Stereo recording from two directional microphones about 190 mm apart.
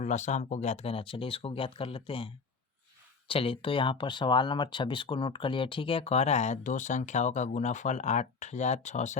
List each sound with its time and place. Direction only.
0.0 s speech: 40° left (ahead or behind)